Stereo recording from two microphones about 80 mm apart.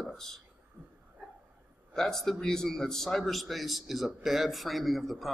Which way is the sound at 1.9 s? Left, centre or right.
Centre.